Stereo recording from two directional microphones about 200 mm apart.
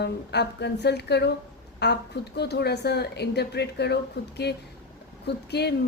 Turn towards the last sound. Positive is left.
turn(degrees=55)  # may be behind; listen again after turning